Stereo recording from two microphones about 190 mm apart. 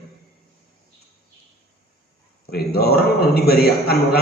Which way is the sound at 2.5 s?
55° left (ahead or behind).